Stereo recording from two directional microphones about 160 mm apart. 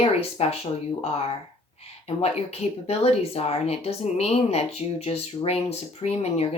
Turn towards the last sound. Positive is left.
turn(degrees=40)  # may be behind; listen again after turning